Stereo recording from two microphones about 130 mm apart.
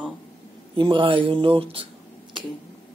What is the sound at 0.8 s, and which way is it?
Speech, 40° right (ahead or behind).